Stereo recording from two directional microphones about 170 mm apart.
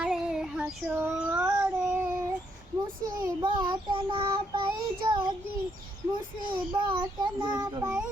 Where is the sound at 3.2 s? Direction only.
25° right (ahead or behind).